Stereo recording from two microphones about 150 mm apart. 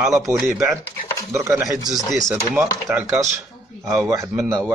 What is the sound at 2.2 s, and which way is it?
A man's voice, 15° right (ahead or behind).